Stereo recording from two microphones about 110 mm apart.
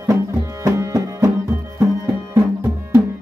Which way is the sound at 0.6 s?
30° right (ahead or behind).